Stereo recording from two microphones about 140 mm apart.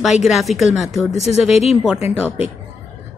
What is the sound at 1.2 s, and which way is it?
Speech, 50° left (ahead or behind).